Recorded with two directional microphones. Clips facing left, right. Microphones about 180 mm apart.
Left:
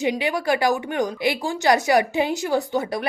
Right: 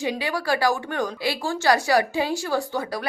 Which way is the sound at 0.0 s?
20° left (ahead or behind).